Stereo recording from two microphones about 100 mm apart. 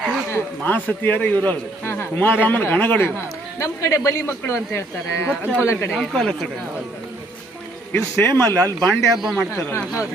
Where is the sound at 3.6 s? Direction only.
30° left (ahead or behind).